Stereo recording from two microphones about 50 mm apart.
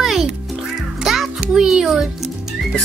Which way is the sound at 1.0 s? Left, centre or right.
Centre.